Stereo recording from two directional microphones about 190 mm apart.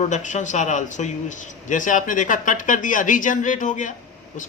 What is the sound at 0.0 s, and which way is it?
Speech, 40° left (ahead or behind).